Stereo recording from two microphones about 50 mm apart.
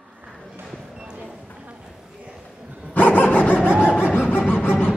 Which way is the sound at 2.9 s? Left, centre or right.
Left.